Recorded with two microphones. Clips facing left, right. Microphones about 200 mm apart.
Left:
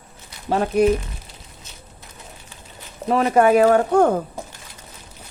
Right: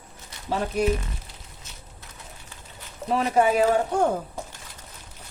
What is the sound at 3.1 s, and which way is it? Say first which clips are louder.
Speech: left 6 dB; 60° left (ahead or behind).